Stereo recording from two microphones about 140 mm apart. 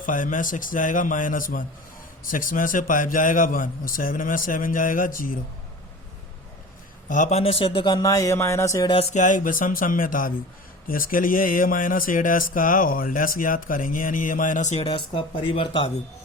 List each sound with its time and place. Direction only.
0.0 s a man's voice: 70° left (ahead or behind)
7.1 s speech: 55° left (ahead or behind); by 8.9 s 20° left (ahead or behind)
9.1 s a man's voice: 65° left (ahead or behind)
10.8 s speech: 90° left; by 14.8 s 55° left (ahead or behind)
14.8 s speech: 40° left (ahead or behind)